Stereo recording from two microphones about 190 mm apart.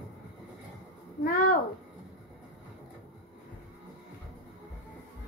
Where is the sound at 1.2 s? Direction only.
50° left (ahead or behind).